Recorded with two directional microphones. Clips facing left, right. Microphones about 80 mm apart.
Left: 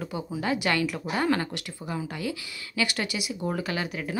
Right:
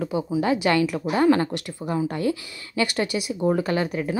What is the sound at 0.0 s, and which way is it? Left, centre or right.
Speech, centre.